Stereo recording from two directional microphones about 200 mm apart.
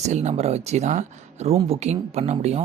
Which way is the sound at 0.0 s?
35° right (ahead or behind).